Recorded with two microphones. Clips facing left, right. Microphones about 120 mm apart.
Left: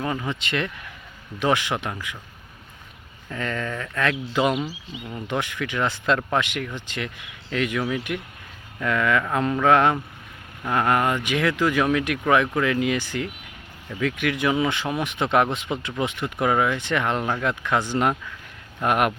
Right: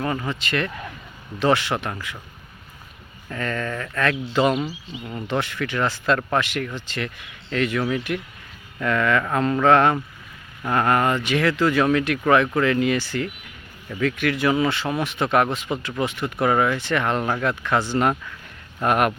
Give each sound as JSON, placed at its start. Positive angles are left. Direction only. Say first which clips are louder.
{"t": 0.0, "sound": "speech", "louder": "right 1 dB", "side_deg": 10}
{"t": 3.2, "sound": "speech", "louder": "right 1 dB", "side_deg": 15}